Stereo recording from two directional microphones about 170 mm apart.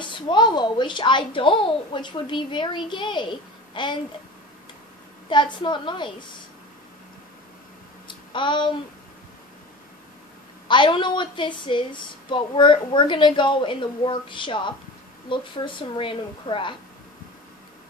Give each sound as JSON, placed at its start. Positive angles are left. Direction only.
{"t": 0.0, "sound": "a child's voice", "side_deg": 25}
{"t": 5.3, "sound": "a child's voice", "side_deg": 25}
{"t": 8.1, "sound": "a sound", "side_deg": 30}
{"t": 10.7, "sound": "a child's voice", "side_deg": 30}